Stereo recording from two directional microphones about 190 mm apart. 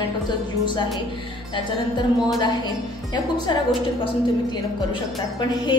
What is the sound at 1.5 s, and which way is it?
A woman's voice, 20° left (ahead or behind).